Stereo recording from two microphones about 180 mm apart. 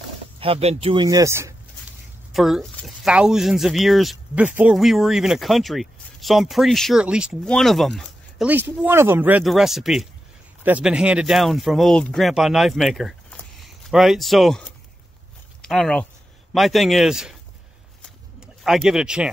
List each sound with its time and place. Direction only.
0.4 s speech: 35° right (ahead or behind)
1.0 s speech: 15° right (ahead or behind)
2.3 s speech: centre (ahead or behind)
18.0 s a sound: centre (ahead or behind)